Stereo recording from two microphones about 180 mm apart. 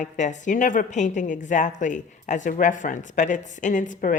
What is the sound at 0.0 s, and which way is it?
A woman's voice, 45° left (ahead or behind).